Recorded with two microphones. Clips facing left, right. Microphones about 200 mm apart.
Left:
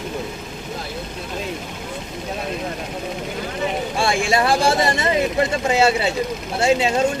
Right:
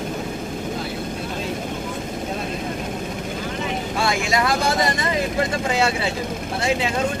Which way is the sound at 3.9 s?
30° left (ahead or behind).